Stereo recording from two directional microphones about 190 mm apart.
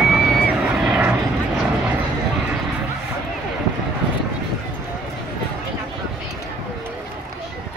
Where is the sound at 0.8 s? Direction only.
5° right (ahead or behind).